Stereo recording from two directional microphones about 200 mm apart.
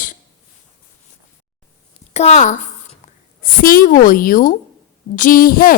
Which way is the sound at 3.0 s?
35° left (ahead or behind).